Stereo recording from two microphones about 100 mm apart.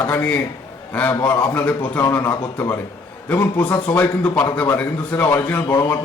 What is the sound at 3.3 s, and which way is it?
A man's voice, 20° left (ahead or behind).